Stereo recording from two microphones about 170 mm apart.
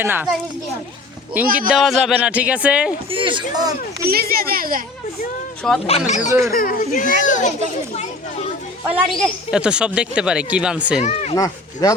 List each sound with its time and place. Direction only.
0.0 s a man's voice: 10° right (ahead or behind)
1.4 s a man's voice: 10° right (ahead or behind)
3.1 s speech: 30° right (ahead or behind)
4.0 s speech: 65° right (ahead or behind)
5.8 s a child's voice: 40° left (ahead or behind)
6.5 s a child's voice: 55° left (ahead or behind)
9.0 s speech: centre (ahead or behind)
11.0 s speech: 40° left (ahead or behind)
11.3 s speech: 20° left (ahead or behind)